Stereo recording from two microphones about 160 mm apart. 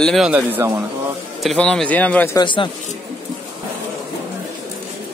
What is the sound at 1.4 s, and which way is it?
Speech, 5° left (ahead or behind).